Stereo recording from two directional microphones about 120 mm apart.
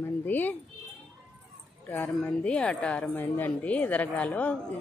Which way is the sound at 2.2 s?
10° left (ahead or behind).